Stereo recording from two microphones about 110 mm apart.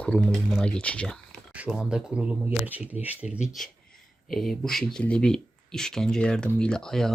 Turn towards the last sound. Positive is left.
turn(degrees=5)  # may be behind; listen again after turning